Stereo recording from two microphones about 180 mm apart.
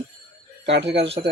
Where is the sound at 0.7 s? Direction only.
70° right (ahead or behind).